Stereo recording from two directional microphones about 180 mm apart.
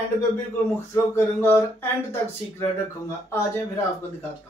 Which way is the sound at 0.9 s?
10° left (ahead or behind).